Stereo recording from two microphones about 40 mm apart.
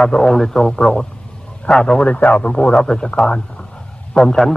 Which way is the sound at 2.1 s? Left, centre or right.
Left.